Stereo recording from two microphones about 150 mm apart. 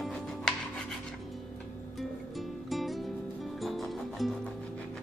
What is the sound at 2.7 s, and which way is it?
Music, centre (ahead or behind).